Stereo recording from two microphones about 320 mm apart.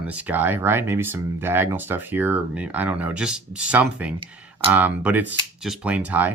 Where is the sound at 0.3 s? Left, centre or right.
Centre.